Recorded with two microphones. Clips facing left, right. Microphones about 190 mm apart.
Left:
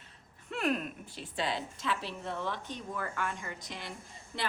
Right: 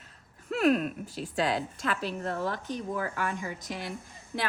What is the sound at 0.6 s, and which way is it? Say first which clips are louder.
A woman's voice: right 8 dB; 40° right (ahead or behind).